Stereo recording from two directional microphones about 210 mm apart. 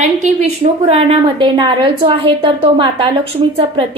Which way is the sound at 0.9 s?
25° right (ahead or behind).